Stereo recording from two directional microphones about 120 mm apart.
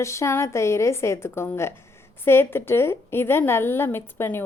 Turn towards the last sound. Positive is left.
turn(degrees=20)  # may be behind; listen again after turning